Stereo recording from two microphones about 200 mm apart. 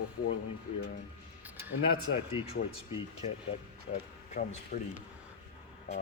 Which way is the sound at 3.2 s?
30° left (ahead or behind).